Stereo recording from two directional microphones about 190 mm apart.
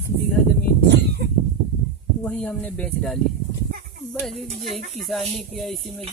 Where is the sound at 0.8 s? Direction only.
60° right (ahead or behind).